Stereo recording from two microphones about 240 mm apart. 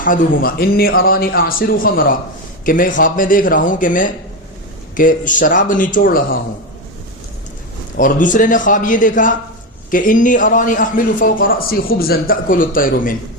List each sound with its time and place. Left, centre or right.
0.0 s a man's voice: left
7.9 s a man's voice: left